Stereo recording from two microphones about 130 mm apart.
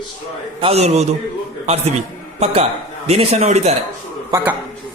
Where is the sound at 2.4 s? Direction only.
55° right (ahead or behind).